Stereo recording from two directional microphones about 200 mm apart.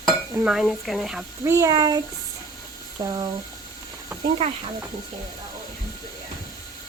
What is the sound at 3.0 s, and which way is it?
Speech, 20° right (ahead or behind).